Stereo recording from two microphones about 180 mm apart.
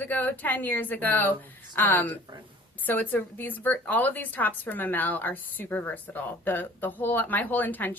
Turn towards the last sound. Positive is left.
turn(degrees=10)  # may be behind; listen again after turning